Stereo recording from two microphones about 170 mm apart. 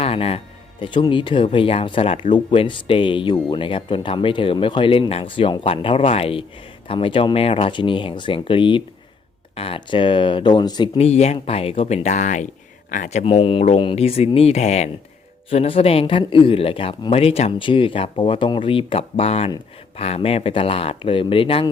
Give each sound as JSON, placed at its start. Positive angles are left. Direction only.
{"t": 0.0, "sound": "speech", "side_deg": 35}
{"t": 10.9, "sound": "speech", "side_deg": 40}
{"t": 13.2, "sound": "speech", "side_deg": 35}